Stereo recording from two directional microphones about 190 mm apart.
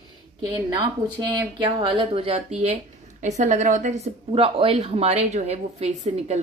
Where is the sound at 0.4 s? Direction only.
25° right (ahead or behind).